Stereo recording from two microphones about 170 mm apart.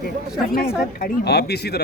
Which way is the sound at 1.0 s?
75° left (ahead or behind).